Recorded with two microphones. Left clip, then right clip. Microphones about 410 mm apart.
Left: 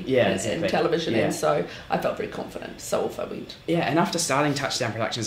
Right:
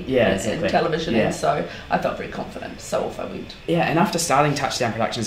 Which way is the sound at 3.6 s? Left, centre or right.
Left.